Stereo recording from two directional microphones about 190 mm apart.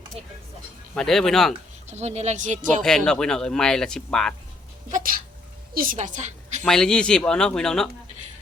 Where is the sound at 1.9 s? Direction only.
35° right (ahead or behind).